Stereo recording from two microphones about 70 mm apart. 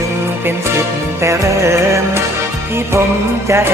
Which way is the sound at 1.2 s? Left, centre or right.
Right.